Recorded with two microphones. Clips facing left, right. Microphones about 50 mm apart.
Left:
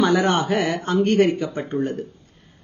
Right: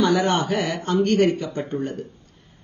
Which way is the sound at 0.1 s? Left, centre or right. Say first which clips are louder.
Left 1 dB; centre.